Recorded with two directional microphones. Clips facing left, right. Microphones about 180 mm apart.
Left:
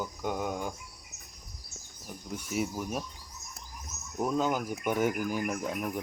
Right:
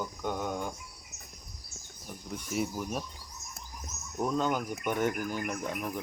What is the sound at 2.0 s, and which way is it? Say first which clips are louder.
Speech: left 1 dB; centre (ahead or behind).